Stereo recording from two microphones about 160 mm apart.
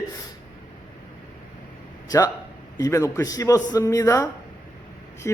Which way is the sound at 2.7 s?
20° left (ahead or behind).